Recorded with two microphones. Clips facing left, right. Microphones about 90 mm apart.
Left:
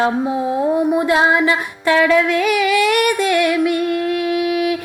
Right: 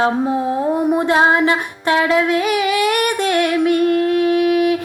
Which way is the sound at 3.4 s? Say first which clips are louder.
Right 1 dB; 35° right (ahead or behind).